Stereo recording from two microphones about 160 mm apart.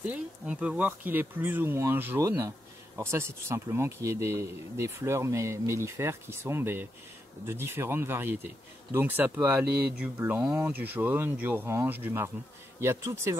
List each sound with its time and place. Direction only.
0.0 s speech: 10° right (ahead or behind)